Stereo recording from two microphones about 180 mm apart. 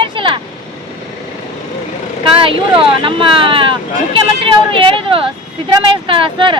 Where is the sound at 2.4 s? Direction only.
30° right (ahead or behind).